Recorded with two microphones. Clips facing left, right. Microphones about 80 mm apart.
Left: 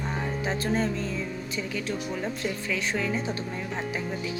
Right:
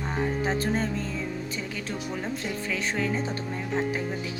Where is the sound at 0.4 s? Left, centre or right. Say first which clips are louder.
Even; right.